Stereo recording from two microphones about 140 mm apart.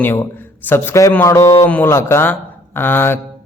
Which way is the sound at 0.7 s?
20° left (ahead or behind).